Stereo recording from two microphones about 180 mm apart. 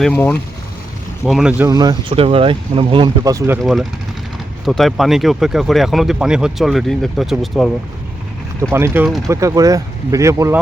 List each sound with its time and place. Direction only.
0.0 s speech: 10° left (ahead or behind)
1.2 s speech: 5° right (ahead or behind)
1.6 s speech: 20° right (ahead or behind)
3.6 s speech: centre (ahead or behind)
8.7 s speech: 10° right (ahead or behind)
9.0 s speech: centre (ahead or behind)
9.3 s speech: 20° right (ahead or behind)